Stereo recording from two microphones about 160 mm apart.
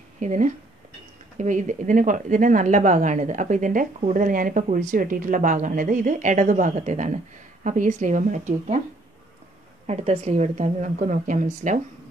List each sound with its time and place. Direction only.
0.2 s speech: 50° right (ahead or behind)
9.8 s speech: 45° right (ahead or behind)